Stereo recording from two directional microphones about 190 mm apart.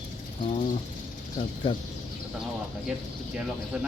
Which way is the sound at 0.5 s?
40° left (ahead or behind).